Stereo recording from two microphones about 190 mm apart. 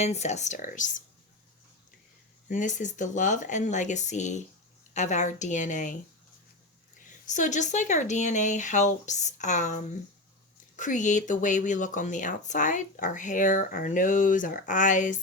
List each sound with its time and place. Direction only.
0.0 s speech: 35° left (ahead or behind)
2.5 s speech: 40° left (ahead or behind)
7.3 s speech: 40° left (ahead or behind)